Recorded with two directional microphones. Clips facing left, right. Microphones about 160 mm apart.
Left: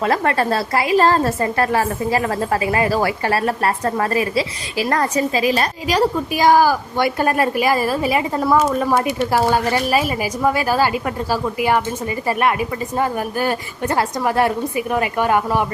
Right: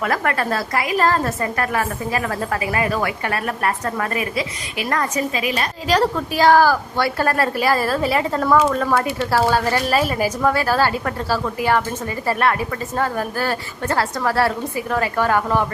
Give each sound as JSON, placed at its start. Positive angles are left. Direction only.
{"t": 0.0, "sound": "a woman's voice", "side_deg": 30}
{"t": 5.9, "sound": "a woman's voice", "side_deg": 10}